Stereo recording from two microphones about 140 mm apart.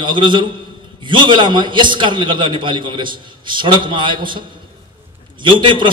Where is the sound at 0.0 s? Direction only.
35° right (ahead or behind).